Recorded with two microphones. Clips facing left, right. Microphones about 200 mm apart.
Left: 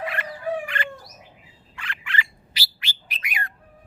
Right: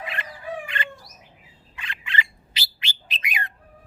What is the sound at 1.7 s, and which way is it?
Bird, 20° right (ahead or behind).